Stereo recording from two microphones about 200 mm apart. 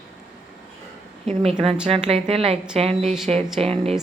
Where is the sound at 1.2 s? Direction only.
30° right (ahead or behind).